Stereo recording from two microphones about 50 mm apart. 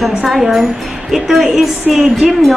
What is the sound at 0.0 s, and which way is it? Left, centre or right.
A woman's voice, centre.